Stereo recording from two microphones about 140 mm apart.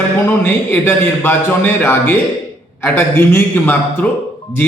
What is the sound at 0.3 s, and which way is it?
A man's voice, 15° left (ahead or behind).